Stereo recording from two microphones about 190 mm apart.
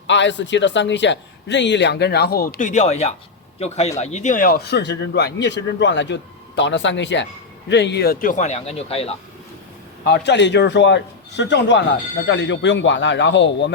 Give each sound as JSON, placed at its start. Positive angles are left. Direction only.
{"t": 0.1, "sound": "a man's voice", "side_deg": 70}
{"t": 10.1, "sound": "a man's voice", "side_deg": 65}